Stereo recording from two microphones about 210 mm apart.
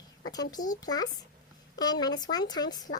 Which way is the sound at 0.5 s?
20° left (ahead or behind).